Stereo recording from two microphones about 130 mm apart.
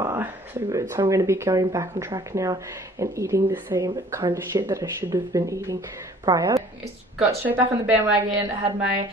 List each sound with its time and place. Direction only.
0.0 s speech: 20° right (ahead or behind)
7.2 s a woman's voice: 15° right (ahead or behind)